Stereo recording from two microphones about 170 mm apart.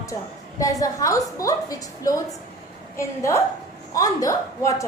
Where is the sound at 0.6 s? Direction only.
20° left (ahead or behind).